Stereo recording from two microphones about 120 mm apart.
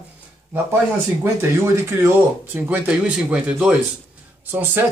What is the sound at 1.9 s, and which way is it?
Speech, 20° right (ahead or behind).